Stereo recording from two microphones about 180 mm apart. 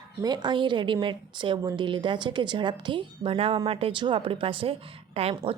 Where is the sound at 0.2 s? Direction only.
25° right (ahead or behind).